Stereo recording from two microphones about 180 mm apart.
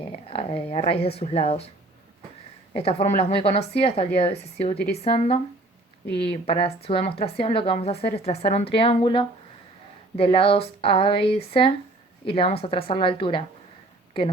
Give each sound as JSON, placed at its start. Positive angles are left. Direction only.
{"t": 0.3, "sound": "speech", "side_deg": 35}
{"t": 3.2, "sound": "speech", "side_deg": 35}
{"t": 6.1, "sound": "speech", "side_deg": 70}
{"t": 6.4, "sound": "a woman's voice", "side_deg": 30}